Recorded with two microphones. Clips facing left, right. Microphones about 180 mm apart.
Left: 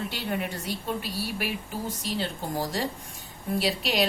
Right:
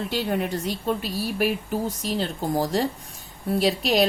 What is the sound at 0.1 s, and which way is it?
A woman's voice, 40° right (ahead or behind).